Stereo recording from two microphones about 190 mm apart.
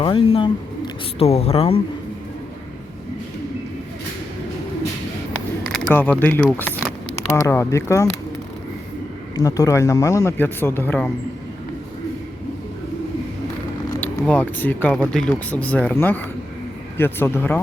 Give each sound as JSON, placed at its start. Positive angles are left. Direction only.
{"t": 0.0, "sound": "speech", "side_deg": 25}
{"t": 5.7, "sound": "speech", "side_deg": 5}
{"t": 9.3, "sound": "speech", "side_deg": 20}
{"t": 14.0, "sound": "speech", "side_deg": 10}